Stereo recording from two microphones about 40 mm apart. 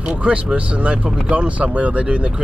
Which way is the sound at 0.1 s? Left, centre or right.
Right.